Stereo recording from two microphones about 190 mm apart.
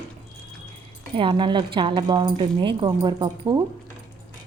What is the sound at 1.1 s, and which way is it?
Speech, 25° right (ahead or behind).